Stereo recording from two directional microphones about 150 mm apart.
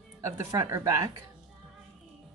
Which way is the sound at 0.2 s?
20° right (ahead or behind).